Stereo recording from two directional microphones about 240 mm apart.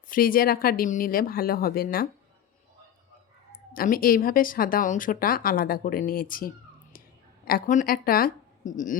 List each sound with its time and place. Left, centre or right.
0.1 s speech: left
3.8 s a woman's voice: left